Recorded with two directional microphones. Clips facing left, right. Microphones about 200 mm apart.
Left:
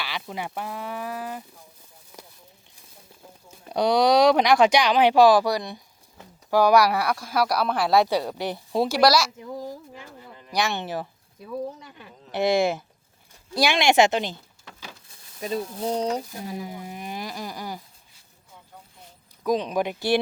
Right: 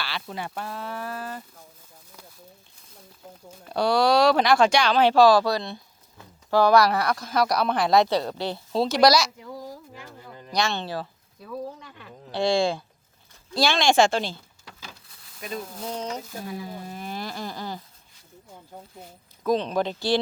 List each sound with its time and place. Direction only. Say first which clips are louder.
0.0 s speech: left 1 dB; 15° left (ahead or behind)
3.7 s speech: left 1 dB; 20° left (ahead or behind)
9.0 s speech: right 1 dB; centre (ahead or behind)
9.4 s a sound: left 4 dB; 20° left (ahead or behind)
10.5 s speech: even; 15° left (ahead or behind)
15.4 s speech: left 6 dB; 30° left (ahead or behind)
16.4 s speech: left 1 dB; 20° left (ahead or behind)
19.5 s speech: even; 10° left (ahead or behind)